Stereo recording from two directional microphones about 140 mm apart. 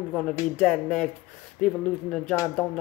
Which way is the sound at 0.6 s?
10° left (ahead or behind).